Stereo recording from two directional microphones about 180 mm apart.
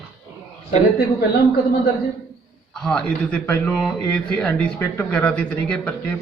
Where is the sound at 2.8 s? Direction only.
5° left (ahead or behind).